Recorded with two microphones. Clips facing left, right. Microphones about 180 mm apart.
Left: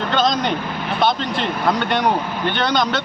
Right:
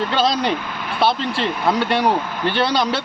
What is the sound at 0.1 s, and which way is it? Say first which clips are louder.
Speech: left 3 dB; 5° right (ahead or behind).